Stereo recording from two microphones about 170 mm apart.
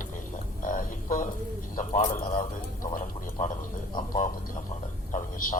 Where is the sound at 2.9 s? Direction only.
50° left (ahead or behind).